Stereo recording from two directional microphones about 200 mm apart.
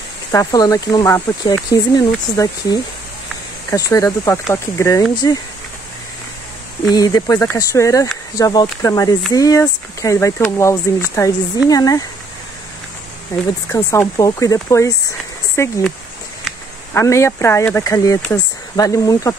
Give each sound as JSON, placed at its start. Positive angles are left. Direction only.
{"t": 0.3, "sound": "speech", "side_deg": 15}
{"t": 6.9, "sound": "speech", "side_deg": 20}
{"t": 13.3, "sound": "speech", "side_deg": 15}
{"t": 16.9, "sound": "speech", "side_deg": 15}